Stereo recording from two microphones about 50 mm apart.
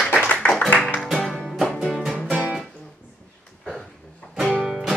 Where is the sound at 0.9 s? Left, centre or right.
Centre.